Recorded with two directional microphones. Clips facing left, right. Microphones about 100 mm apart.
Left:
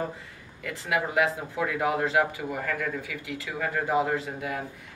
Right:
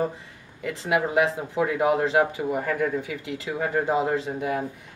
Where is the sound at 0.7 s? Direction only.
20° right (ahead or behind).